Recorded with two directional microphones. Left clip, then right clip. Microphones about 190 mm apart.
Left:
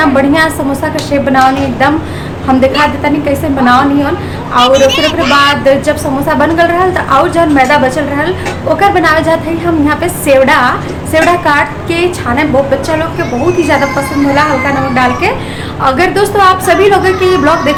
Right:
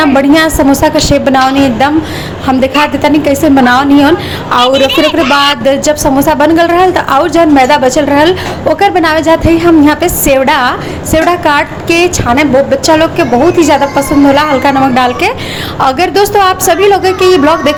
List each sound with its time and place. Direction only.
0.0 s a woman's voice: 35° right (ahead or behind)